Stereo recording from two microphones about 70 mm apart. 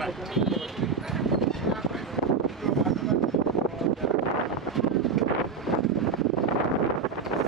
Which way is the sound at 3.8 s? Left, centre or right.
Centre.